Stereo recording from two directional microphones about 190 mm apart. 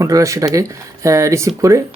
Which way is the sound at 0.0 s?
15° right (ahead or behind).